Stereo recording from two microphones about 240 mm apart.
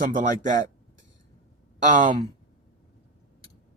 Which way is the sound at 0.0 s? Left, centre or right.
Right.